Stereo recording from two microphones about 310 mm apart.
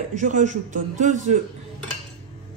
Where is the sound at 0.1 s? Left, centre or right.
Right.